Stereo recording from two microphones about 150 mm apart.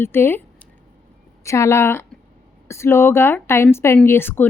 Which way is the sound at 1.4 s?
20° left (ahead or behind).